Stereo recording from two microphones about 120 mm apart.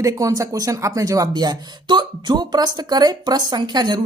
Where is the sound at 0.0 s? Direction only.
30° right (ahead or behind).